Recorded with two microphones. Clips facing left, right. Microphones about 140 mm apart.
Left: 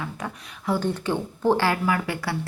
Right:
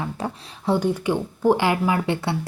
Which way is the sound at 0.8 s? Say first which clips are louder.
Right 3 dB; 10° right (ahead or behind).